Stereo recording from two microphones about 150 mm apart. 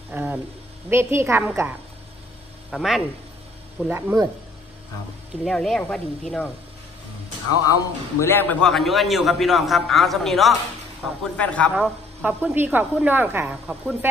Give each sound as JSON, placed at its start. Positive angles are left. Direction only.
{"t": 0.1, "sound": "a sound", "side_deg": -10}
{"t": 0.8, "sound": "a woman's voice", "side_deg": -15}
{"t": 2.7, "sound": "a man's voice", "side_deg": 0}
{"t": 3.9, "sound": "a woman's voice", "side_deg": -15}
{"t": 5.4, "sound": "a man's voice", "side_deg": 0}
{"t": 7.6, "sound": "a man's voice", "side_deg": 20}
{"t": 11.7, "sound": "a woman's voice", "side_deg": -10}